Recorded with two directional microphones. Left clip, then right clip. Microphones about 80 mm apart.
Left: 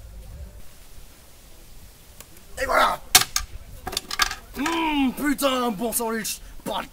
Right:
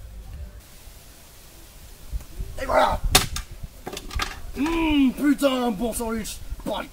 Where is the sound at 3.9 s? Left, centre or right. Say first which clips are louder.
Left 6 dB; left.